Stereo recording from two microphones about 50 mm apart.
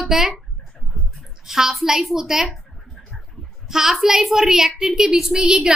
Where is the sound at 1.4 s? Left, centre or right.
Centre.